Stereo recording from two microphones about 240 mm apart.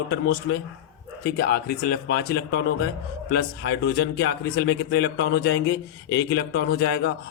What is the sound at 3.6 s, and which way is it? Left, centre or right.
Speech, left.